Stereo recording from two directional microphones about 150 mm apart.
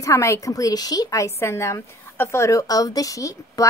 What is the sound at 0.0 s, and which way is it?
A woman's voice, 20° left (ahead or behind).